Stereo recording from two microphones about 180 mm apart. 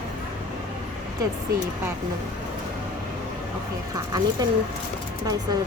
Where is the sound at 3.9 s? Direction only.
20° right (ahead or behind).